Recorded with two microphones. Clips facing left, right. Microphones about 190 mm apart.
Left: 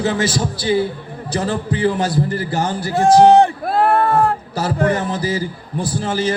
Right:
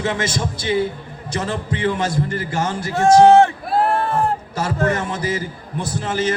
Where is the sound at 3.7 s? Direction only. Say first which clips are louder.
Left 3 dB; 55° left (ahead or behind).